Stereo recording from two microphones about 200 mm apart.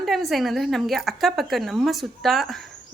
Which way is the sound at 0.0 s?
Centre (ahead or behind).